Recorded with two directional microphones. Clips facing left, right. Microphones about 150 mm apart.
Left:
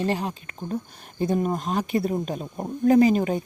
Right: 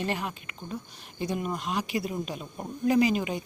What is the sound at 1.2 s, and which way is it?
Speech, 45° left (ahead or behind).